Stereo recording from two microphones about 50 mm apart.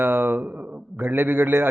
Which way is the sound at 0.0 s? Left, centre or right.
Right.